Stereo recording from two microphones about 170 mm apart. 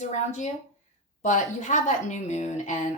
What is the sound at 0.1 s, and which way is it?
A woman's voice, 40° left (ahead or behind).